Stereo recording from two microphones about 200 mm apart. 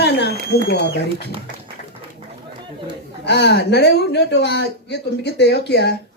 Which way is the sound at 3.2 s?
55° left (ahead or behind).